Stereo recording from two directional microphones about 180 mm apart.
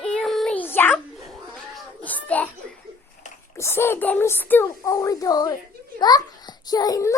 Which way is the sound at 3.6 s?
15° left (ahead or behind).